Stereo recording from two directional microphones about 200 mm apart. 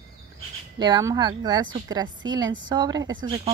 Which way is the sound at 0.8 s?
20° right (ahead or behind).